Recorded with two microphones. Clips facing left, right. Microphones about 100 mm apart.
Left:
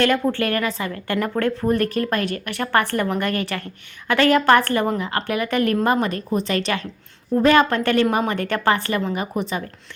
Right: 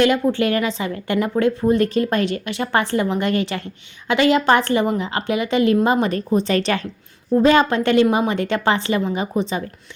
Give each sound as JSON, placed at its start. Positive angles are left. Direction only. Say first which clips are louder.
{"t": 0.0, "sound": "a woman's voice", "louder": "right 3 dB", "side_deg": -15}
{"t": 6.5, "sound": "a woman's voice", "louder": "right 3 dB", "side_deg": -35}